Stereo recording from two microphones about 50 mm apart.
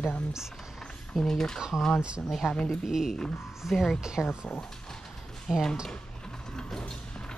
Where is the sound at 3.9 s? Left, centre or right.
Centre.